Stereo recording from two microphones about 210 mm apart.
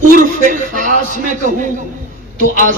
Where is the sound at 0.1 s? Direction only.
40° right (ahead or behind).